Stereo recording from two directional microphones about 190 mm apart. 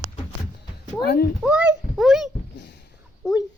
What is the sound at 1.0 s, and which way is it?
Speech, 55° left (ahead or behind).